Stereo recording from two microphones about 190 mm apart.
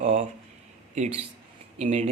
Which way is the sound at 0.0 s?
30° right (ahead or behind).